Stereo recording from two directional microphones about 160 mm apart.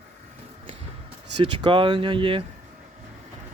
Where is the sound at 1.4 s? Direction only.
30° right (ahead or behind).